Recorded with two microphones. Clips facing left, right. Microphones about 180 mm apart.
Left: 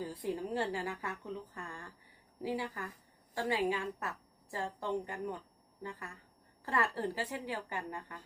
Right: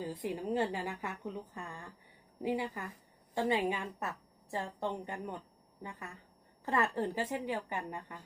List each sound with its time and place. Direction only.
0.0 s a woman's voice: 20° right (ahead or behind)
6.7 s a woman's voice: 20° right (ahead or behind)